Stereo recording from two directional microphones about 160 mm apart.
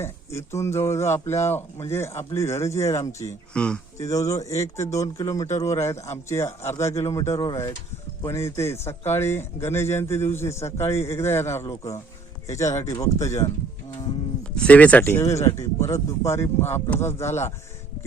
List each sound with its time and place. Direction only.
0.0 s a man's voice: 15° left (ahead or behind)
3.5 s a man's voice: 5° left (ahead or behind)
3.9 s a man's voice: 20° left (ahead or behind)
14.5 s a man's voice: 10° left (ahead or behind)